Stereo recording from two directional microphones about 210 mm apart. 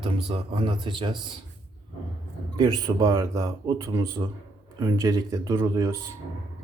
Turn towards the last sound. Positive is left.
turn(degrees=-15)  # may be behind; listen again after turning